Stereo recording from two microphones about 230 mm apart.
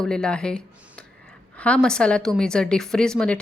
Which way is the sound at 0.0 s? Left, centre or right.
Centre.